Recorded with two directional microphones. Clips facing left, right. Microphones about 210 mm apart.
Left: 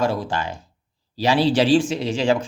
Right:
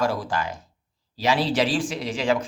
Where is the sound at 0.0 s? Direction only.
25° left (ahead or behind).